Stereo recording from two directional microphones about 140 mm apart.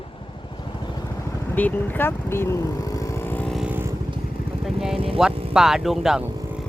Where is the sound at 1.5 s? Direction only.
10° left (ahead or behind).